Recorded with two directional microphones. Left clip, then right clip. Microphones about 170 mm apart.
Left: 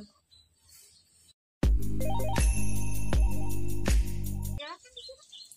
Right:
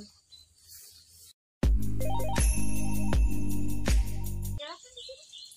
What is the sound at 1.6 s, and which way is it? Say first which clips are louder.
Music: even; centre (ahead or behind).